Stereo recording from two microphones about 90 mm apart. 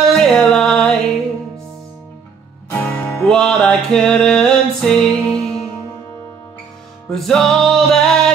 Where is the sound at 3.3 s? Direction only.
10° left (ahead or behind).